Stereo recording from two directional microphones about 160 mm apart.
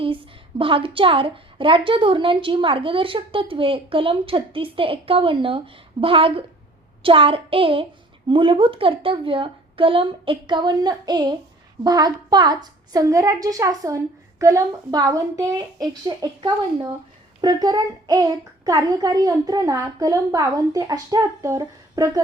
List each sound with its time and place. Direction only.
0.6 s a woman's voice: 35° right (ahead or behind)